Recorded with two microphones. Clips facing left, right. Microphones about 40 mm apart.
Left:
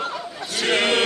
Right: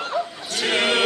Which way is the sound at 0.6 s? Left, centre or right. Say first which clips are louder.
Left 1 dB; centre.